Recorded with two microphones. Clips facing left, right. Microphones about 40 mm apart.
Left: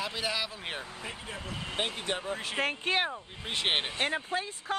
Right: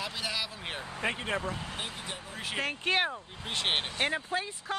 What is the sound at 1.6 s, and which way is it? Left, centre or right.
Speech, left.